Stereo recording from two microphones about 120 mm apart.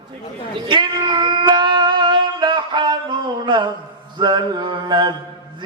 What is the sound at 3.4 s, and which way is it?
A man's voice, 40° right (ahead or behind).